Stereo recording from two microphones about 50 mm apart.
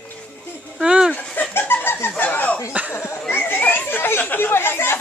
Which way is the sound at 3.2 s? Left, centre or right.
Left.